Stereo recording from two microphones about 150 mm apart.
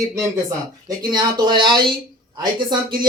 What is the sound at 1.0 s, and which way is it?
Speech, 30° right (ahead or behind).